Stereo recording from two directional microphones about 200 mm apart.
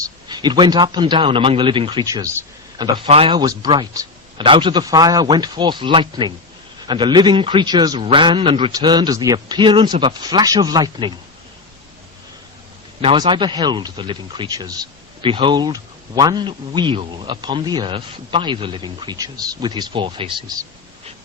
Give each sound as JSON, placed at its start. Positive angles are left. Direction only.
{"t": 0.0, "sound": "speech", "side_deg": -20}
{"t": 13.0, "sound": "speech", "side_deg": -25}